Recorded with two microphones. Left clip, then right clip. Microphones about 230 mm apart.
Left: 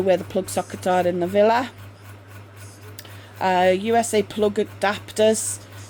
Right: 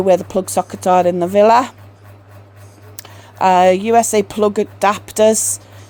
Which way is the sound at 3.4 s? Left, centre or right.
Right.